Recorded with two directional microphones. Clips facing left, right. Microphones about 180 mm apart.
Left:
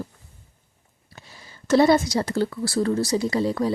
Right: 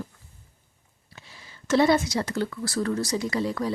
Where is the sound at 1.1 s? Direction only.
40° left (ahead or behind).